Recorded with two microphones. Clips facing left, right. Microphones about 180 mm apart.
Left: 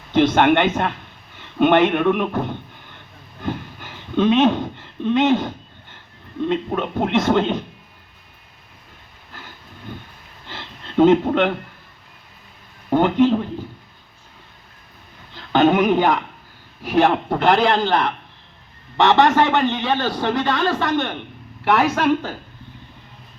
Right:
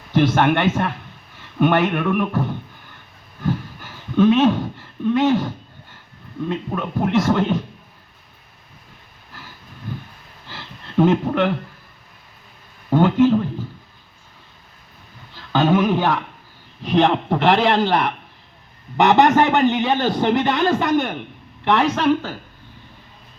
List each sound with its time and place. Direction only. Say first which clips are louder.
0.1 s speech: left 2 dB; 20° left (ahead or behind)
3.4 s a sound: right 3 dB; 20° left (ahead or behind)
6.5 s speech: left 3 dB; 20° left (ahead or behind)
10.5 s a sound: even; 20° left (ahead or behind)
12.9 s speech: right 1 dB; 15° left (ahead or behind)
15.4 s speech: left 2 dB; 20° left (ahead or behind)
16.8 s a man's voice: even; 5° left (ahead or behind)
18.9 s a man's voice: right 1 dB; 20° right (ahead or behind)
21.6 s speech: even; 5° left (ahead or behind)